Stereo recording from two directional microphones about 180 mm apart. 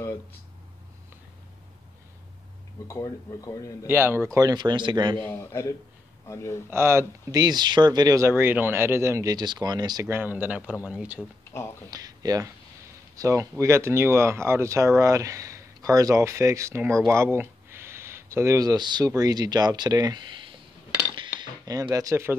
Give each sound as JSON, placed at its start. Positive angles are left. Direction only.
{"t": 2.9, "sound": "speech", "side_deg": 15}
{"t": 3.8, "sound": "speech", "side_deg": -15}
{"t": 5.3, "sound": "speech", "side_deg": 15}
{"t": 6.7, "sound": "speech", "side_deg": -15}
{"t": 10.0, "sound": "speech", "side_deg": -10}
{"t": 11.5, "sound": "speech", "side_deg": 15}
{"t": 11.9, "sound": "speech", "side_deg": -20}
{"t": 21.1, "sound": "cutlery", "side_deg": -25}
{"t": 21.9, "sound": "speech", "side_deg": -15}